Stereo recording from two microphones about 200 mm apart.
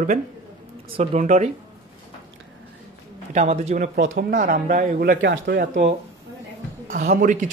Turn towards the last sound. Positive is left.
turn(degrees=-40)  # may be behind; listen again after turning